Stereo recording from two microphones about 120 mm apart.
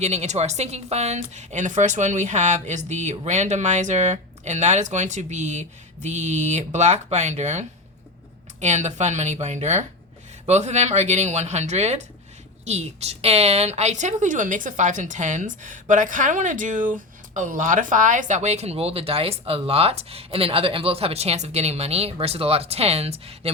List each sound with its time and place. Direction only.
0.0 s a woman's voice: 70° right (ahead or behind)